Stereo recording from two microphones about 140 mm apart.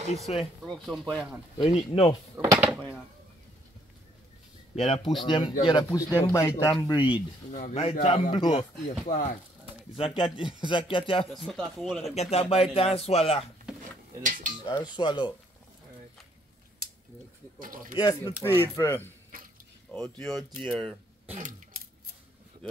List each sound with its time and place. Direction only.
0.3 s speech: 50° left (ahead or behind)
0.7 s speech: centre (ahead or behind)
1.6 s speech: 40° left (ahead or behind)
2.3 s speech: 25° right (ahead or behind)
4.7 s speech: 50° left (ahead or behind); by 7.1 s 30° left (ahead or behind)
7.5 s speech: 60° left (ahead or behind)
9.9 s speech: 40° left (ahead or behind)
11.3 s speech: centre (ahead or behind)
12.2 s speech: 45° left (ahead or behind)
14.2 s cutlery: 70° right (ahead or behind)
14.7 s speech: 35° left (ahead or behind)
17.6 s speech: 75° right (ahead or behind)
18.2 s speech: 20° left (ahead or behind); by 21.0 s centre (ahead or behind)